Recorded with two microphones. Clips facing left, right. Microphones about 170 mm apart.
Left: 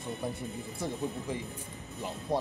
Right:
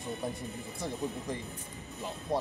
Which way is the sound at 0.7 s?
Centre (ahead or behind).